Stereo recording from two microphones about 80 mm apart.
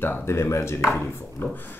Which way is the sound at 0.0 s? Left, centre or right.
Left.